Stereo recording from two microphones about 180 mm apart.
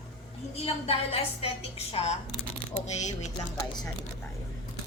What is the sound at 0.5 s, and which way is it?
A woman's voice, 35° left (ahead or behind).